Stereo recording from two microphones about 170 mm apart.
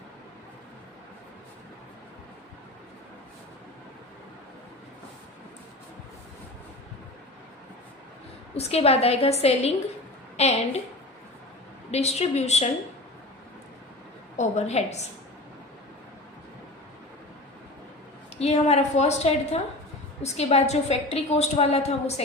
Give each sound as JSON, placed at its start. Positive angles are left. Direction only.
{"t": 8.5, "sound": "a woman's voice", "side_deg": 35}
{"t": 11.9, "sound": "a woman's voice", "side_deg": 40}
{"t": 14.3, "sound": "a woman's voice", "side_deg": 40}
{"t": 18.3, "sound": "a woman's voice", "side_deg": 40}